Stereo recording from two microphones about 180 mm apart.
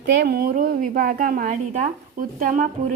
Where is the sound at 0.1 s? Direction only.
65° right (ahead or behind).